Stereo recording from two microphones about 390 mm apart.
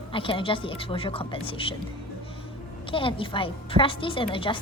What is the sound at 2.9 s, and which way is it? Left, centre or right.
A woman's voice, centre.